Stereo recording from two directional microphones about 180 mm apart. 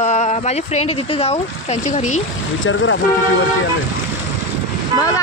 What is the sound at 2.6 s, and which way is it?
Speech, 90° left.